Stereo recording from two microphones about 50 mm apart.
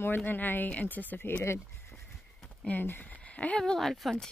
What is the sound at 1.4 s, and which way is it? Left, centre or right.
Speech, left.